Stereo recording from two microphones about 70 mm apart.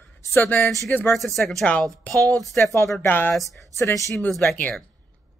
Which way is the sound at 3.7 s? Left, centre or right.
Left.